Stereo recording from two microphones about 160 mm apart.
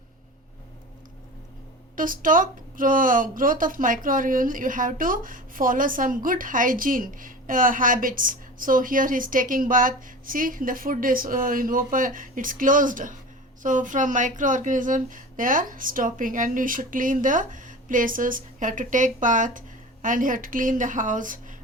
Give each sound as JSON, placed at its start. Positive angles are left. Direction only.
{"t": 2.0, "sound": "a woman's voice", "side_deg": -60}